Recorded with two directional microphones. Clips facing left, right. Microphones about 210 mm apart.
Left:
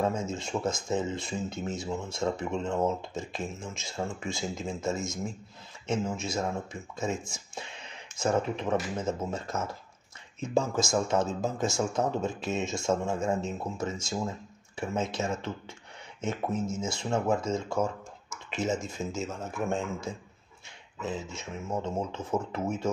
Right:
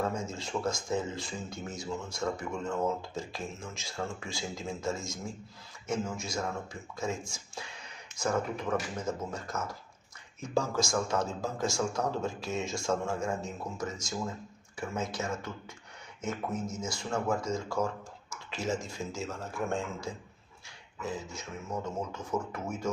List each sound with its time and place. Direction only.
0.3 s speech: 20° left (ahead or behind)